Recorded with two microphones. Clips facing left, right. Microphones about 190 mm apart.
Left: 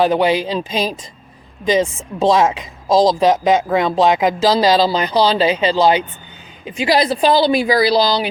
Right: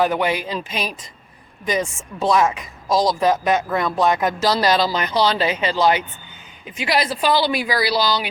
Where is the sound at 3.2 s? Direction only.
25° left (ahead or behind).